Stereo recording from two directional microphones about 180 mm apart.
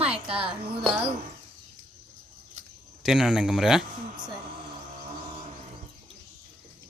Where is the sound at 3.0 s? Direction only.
Centre (ahead or behind).